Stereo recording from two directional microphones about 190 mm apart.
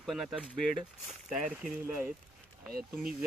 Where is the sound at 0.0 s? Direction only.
Centre (ahead or behind).